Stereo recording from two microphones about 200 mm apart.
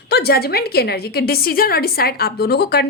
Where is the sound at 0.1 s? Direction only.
50° left (ahead or behind).